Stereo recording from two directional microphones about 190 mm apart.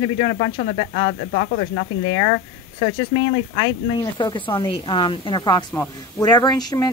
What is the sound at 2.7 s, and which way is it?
Speech, 25° left (ahead or behind).